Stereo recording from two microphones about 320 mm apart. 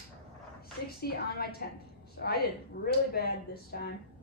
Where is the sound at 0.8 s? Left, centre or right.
Left.